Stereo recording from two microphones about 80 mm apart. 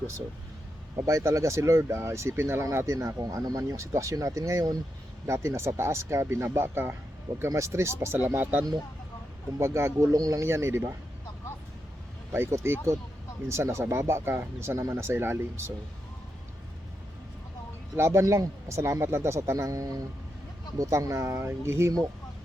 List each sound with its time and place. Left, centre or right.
1.0 s speech: right
3.2 s speech: right
5.2 s speech: right
10.2 s speech: right
10.4 s speech: right
12.3 s speech: right
17.9 s speech: right